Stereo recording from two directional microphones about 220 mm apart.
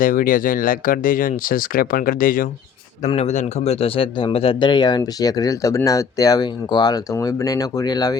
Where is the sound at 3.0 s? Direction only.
30° left (ahead or behind).